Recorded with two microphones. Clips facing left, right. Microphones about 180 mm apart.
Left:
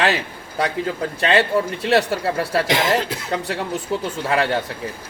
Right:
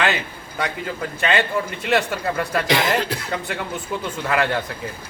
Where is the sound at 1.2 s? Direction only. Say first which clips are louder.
Left 4 dB; 35° left (ahead or behind).